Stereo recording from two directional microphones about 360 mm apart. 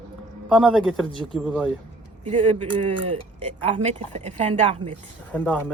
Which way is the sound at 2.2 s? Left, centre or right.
Centre.